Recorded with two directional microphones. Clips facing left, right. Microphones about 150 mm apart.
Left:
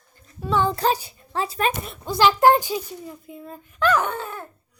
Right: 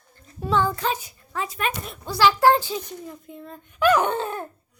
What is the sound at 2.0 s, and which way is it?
A woman's voice, 20° left (ahead or behind).